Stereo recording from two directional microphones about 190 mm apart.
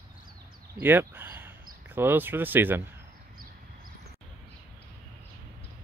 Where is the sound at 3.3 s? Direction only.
50° right (ahead or behind).